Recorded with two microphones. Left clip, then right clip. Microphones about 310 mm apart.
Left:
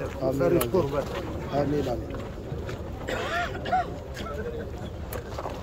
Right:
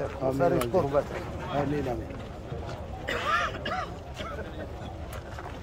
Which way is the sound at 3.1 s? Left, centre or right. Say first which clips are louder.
Right 2 dB; centre.